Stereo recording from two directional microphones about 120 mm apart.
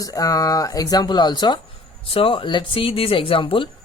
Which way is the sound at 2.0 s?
50° left (ahead or behind).